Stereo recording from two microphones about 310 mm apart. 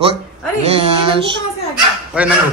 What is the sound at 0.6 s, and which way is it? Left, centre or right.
Speech, centre.